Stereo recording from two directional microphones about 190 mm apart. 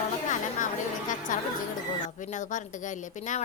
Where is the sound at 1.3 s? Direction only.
45° left (ahead or behind).